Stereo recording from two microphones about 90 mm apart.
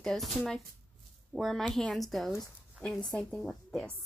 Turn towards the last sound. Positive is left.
turn(degrees=5)  # may be behind; listen again after turning